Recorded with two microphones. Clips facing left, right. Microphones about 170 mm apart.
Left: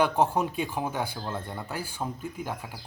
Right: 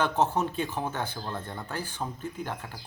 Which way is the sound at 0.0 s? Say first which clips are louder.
Left 2 dB; 10° left (ahead or behind).